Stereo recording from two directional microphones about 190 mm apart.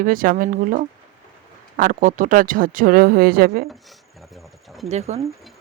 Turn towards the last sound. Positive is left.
turn(degrees=-35)  # may be behind; listen again after turning